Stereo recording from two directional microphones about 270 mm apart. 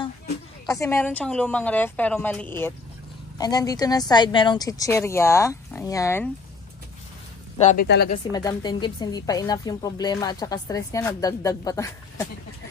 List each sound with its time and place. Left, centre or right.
0.7 s a woman's voice: centre
7.5 s speech: left
7.8 s speech: left
8.3 s a woman's voice: centre